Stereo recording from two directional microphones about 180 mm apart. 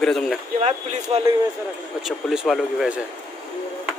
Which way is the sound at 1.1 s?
30° right (ahead or behind).